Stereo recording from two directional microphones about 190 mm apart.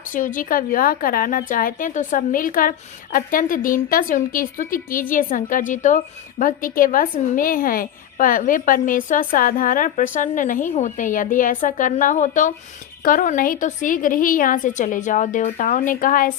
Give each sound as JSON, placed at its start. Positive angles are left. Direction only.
{"t": 0.1, "sound": "a woman's voice", "side_deg": 45}